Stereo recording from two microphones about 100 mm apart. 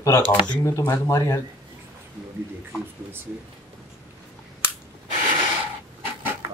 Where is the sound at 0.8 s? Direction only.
25° left (ahead or behind).